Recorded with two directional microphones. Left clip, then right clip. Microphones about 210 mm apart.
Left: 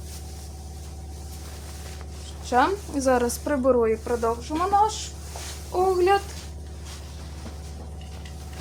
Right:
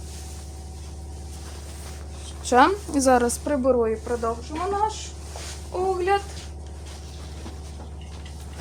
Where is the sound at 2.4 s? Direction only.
45° right (ahead or behind).